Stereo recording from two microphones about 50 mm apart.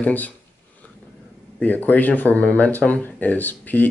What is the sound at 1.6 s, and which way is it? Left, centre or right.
Speech, left.